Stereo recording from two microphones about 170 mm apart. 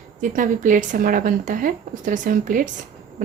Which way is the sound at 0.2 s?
50° right (ahead or behind).